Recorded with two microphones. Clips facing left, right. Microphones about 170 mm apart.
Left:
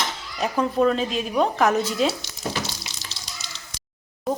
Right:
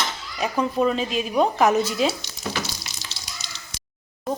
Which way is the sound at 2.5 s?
30° left (ahead or behind).